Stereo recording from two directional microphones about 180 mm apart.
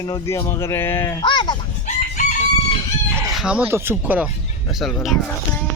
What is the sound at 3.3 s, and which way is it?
Speech, 5° right (ahead or behind).